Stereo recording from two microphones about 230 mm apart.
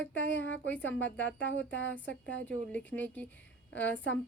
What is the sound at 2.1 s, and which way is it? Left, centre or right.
Speech, left.